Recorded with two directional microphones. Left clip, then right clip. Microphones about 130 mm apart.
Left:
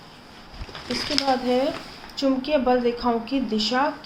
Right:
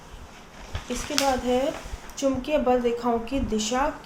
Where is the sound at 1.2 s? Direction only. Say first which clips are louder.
Left 1 dB; 15° left (ahead or behind).